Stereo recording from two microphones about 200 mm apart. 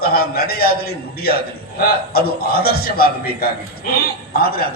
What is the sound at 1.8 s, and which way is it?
A man's voice, 50° left (ahead or behind).